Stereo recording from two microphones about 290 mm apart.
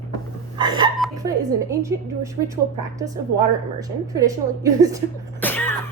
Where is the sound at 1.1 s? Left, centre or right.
Centre.